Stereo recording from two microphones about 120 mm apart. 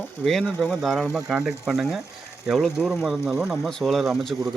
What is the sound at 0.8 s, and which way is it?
Speech, centre (ahead or behind).